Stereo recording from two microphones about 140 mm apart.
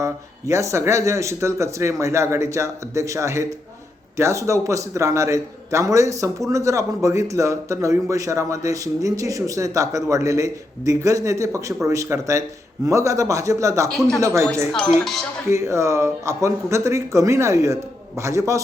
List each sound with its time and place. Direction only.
0.0 s a man's voice: 20° right (ahead or behind)
14.7 s speech: 5° left (ahead or behind)
15.4 s a man's voice: 20° right (ahead or behind)